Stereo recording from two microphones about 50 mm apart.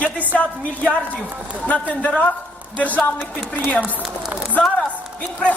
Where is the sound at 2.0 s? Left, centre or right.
Left.